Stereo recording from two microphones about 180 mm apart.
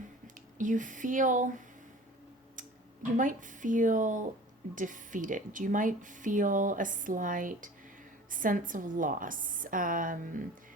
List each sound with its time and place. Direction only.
0.6 s speech: 45° right (ahead or behind)
3.2 s speech: 45° right (ahead or behind)